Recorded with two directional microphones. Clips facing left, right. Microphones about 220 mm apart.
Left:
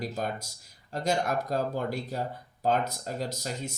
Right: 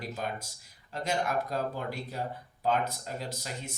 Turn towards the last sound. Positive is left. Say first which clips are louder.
# left 5 dB
turn(degrees=40)  # may be behind; listen again after turning